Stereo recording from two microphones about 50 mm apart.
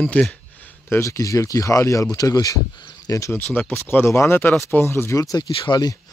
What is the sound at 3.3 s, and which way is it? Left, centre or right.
Speech, left.